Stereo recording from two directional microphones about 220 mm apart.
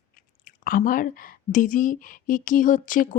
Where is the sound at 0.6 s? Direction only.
40° left (ahead or behind).